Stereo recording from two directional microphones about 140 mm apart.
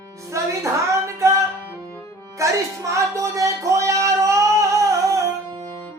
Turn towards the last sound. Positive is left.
turn(degrees=-20)  # may be behind; listen again after turning